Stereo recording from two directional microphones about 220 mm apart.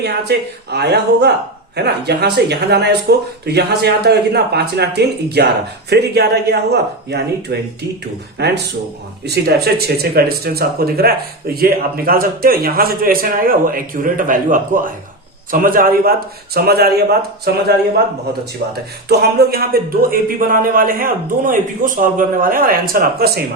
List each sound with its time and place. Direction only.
0.0 s speech: 50° right (ahead or behind)
19.0 s speech: 45° right (ahead or behind)